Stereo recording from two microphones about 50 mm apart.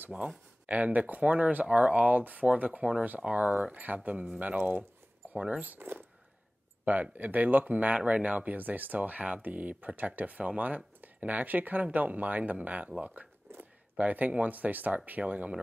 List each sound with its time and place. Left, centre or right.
0.0 s speech: right
5.8 s speech: right